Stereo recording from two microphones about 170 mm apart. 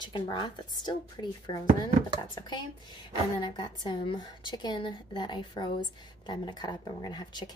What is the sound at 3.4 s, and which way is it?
Speech, 25° left (ahead or behind).